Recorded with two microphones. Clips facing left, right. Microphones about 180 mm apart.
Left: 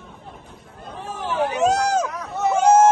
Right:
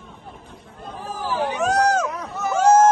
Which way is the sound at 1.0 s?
25° left (ahead or behind).